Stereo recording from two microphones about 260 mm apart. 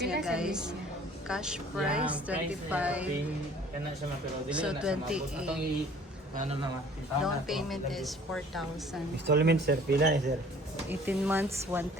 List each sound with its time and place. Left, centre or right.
0.2 s a woman's voice: centre
4.4 s a woman's voice: centre
6.3 s a man's voice: right
7.2 s a woman's voice: centre
9.2 s speech: right
10.8 s speech: centre